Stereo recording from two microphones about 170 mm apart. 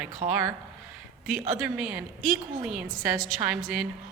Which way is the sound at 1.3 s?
5° right (ahead or behind).